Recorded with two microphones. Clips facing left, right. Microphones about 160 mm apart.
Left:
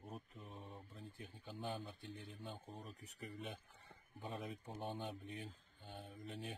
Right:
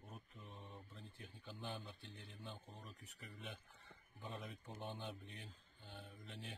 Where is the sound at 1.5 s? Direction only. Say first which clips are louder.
Left 4 dB; 45° left (ahead or behind).